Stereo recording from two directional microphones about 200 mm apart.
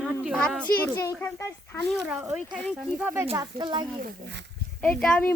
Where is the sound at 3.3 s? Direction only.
20° right (ahead or behind).